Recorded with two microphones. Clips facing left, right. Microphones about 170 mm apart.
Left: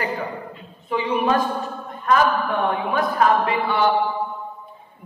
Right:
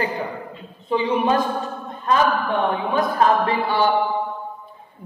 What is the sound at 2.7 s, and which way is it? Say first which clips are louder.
Speech: right 1 dB; 30° right (ahead or behind).